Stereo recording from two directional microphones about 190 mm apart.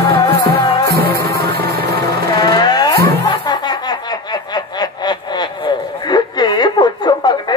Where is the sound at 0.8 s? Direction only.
55° right (ahead or behind).